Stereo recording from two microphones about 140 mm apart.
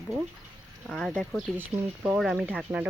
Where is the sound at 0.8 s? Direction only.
5° left (ahead or behind).